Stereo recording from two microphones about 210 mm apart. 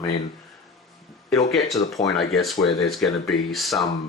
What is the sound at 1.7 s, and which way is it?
Speech, 15° left (ahead or behind).